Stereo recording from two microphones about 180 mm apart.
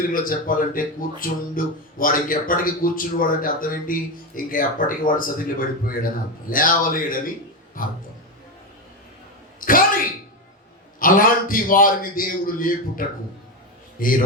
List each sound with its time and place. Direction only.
0.1 s speech: 50° left (ahead or behind)
9.6 s a sound: 50° left (ahead or behind)
11.0 s speech: 50° left (ahead or behind)